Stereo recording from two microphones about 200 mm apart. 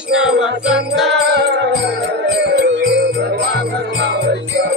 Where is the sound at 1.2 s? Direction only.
60° right (ahead or behind).